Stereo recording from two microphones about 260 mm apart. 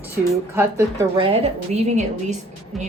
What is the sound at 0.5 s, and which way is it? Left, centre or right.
A woman's voice, centre.